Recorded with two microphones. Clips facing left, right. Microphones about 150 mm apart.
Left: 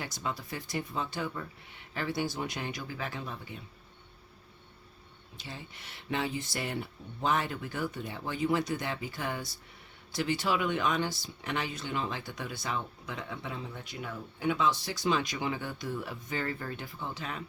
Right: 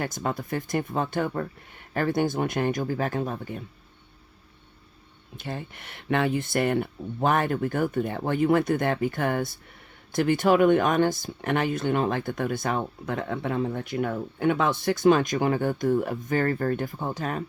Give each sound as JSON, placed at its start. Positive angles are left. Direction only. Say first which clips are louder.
{"t": 0.0, "sound": "speech", "louder": "right 8 dB", "side_deg": -50}
{"t": 5.4, "sound": "speech", "louder": "right 10 dB", "side_deg": -55}